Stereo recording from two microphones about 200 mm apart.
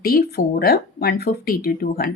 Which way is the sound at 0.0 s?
45° left (ahead or behind).